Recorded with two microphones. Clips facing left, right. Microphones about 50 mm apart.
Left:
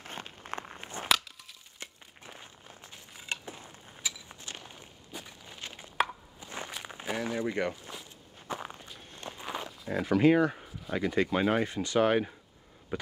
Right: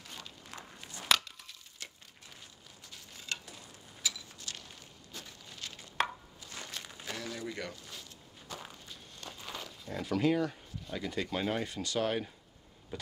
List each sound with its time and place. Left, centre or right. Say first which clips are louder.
0.0 s a sound: left 6 dB; left; by 3.3 s centre
3.4 s walk: left 6 dB; left
6.8 s speech: left 9 dB; left
7.9 s walk: left 4 dB; centre
8.5 s walk: left 5 dB; left
9.9 s speech: left 6 dB; left
12.9 s a sound: left 7 dB; left